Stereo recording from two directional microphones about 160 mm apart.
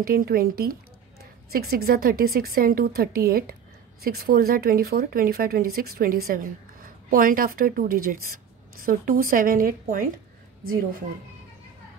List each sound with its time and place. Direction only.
0.0 s a woman's voice: 70° right (ahead or behind)